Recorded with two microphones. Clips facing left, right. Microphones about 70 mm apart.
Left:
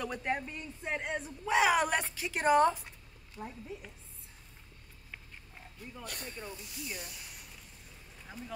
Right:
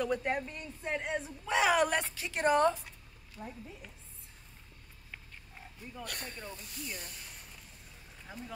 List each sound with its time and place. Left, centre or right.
0.0 s speech: centre
1.4 s speech: centre
3.4 s a woman's voice: left
6.0 s speech: right